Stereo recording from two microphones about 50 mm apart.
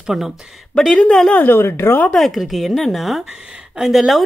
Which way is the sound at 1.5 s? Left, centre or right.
Left.